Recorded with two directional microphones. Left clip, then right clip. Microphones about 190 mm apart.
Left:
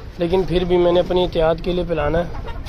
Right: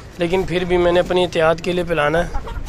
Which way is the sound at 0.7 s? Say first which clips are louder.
Right 1 dB; 10° left (ahead or behind).